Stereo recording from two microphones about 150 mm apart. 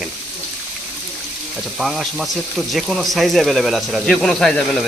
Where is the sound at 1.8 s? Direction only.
Centre (ahead or behind).